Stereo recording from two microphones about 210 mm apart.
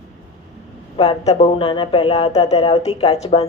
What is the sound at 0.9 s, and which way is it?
Speech, 30° left (ahead or behind).